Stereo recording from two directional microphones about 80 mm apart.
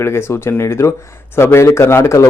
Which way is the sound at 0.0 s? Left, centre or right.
Left.